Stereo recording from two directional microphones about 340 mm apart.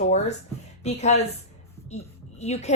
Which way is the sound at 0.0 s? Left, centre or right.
Centre.